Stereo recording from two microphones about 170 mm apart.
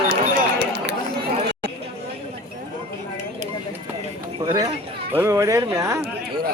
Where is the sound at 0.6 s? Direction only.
80° right.